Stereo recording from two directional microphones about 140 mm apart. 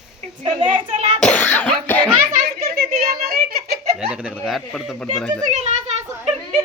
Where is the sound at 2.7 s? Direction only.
90° right.